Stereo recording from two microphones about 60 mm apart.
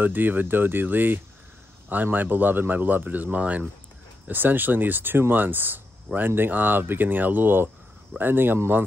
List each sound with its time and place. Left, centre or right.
0.0 s speech: right